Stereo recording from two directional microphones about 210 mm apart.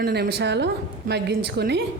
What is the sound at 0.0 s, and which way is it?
A woman's voice, 50° right (ahead or behind).